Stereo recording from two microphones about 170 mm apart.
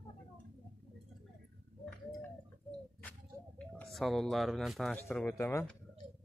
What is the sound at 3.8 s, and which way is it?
Speech, centre (ahead or behind).